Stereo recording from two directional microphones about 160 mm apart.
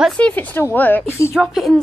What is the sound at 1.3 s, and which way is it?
Speech, centre (ahead or behind).